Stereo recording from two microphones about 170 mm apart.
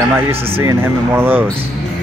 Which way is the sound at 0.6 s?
15° right (ahead or behind).